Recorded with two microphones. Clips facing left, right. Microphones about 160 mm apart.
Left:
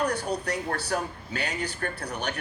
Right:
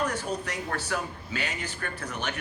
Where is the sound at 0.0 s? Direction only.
40° left (ahead or behind).